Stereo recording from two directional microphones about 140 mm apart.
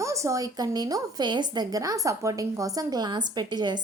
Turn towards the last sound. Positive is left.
turn(degrees=-30)  # may be behind; listen again after turning